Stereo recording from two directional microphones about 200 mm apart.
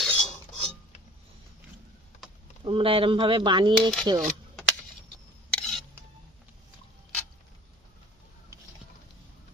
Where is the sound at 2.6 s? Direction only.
25° right (ahead or behind).